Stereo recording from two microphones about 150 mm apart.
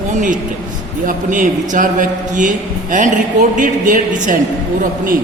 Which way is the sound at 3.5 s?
60° right (ahead or behind).